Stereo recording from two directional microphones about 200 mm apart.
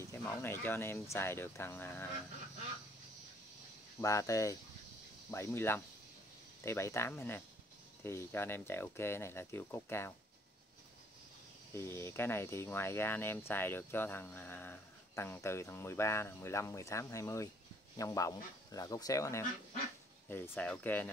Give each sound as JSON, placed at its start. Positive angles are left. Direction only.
{"t": 0.0, "sound": "speech", "side_deg": 10}
{"t": 4.0, "sound": "speech", "side_deg": 15}
{"t": 11.7, "sound": "speech", "side_deg": 10}